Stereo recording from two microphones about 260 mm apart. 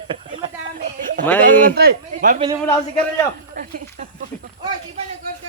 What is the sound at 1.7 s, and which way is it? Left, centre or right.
Speech, right.